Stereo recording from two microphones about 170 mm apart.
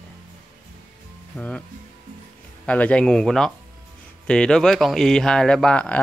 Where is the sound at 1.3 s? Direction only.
5° left (ahead or behind).